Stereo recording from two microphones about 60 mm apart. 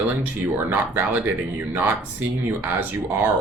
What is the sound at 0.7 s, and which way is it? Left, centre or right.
Speech, right.